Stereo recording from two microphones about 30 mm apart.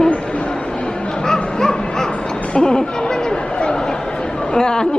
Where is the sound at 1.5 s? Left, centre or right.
Left.